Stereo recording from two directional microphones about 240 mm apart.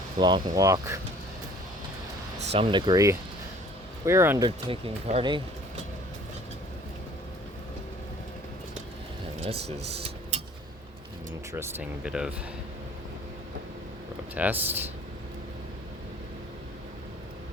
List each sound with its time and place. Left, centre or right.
0.2 s speech: centre
2.5 s speech: right
9.4 s speech: right
11.5 s speech: centre
14.3 s speech: centre